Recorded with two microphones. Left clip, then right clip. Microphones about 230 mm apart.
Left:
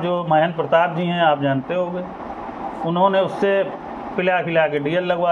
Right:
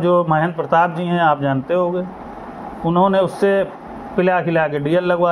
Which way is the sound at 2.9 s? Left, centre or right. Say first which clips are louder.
Right 2 dB; right.